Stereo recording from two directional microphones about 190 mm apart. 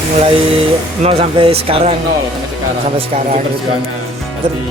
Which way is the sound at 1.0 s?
30° right (ahead or behind).